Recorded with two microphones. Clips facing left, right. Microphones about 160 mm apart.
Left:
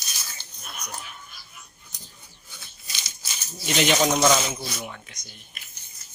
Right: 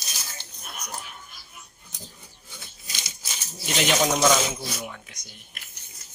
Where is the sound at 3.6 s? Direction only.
Centre (ahead or behind).